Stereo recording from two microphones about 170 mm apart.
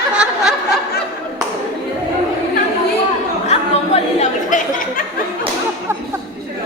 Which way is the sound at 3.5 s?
40° left (ahead or behind).